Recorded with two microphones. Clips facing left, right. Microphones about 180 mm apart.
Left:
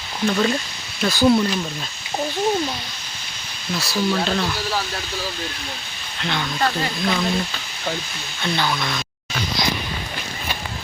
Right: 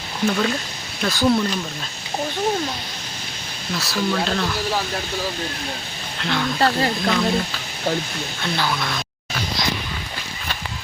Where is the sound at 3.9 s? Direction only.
5° left (ahead or behind).